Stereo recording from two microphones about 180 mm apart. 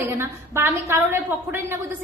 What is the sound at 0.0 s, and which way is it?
A woman's voice, 15° right (ahead or behind).